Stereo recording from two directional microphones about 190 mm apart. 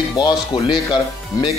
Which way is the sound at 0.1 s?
25° left (ahead or behind).